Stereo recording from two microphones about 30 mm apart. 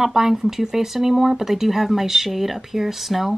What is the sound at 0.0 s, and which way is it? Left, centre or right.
Speech, centre.